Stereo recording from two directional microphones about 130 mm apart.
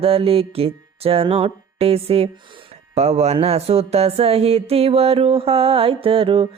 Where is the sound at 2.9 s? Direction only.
55° right (ahead or behind).